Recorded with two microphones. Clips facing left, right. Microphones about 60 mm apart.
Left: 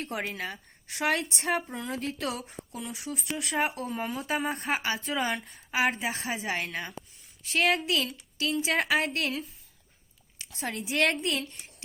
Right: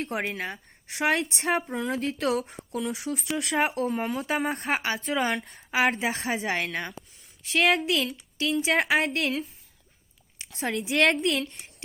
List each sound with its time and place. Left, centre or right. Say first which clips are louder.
0.0 s a woman's voice: right 3 dB; right
1.7 s speech: right 5 dB; right
7.5 s a woman's voice: right 3 dB; right
10.5 s speech: right 4 dB; right